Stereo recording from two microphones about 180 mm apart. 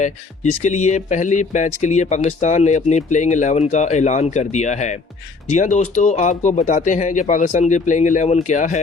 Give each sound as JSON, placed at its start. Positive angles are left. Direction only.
{"t": 0.6, "sound": "speech", "side_deg": 40}